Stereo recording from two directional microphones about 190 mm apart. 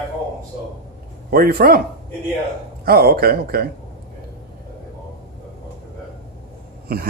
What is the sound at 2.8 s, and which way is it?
Speech, 55° right (ahead or behind).